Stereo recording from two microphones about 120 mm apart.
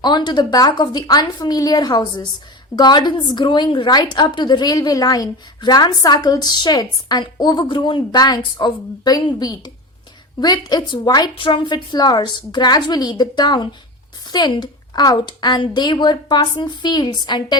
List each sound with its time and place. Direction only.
0.0 s a woman's voice: 40° left (ahead or behind)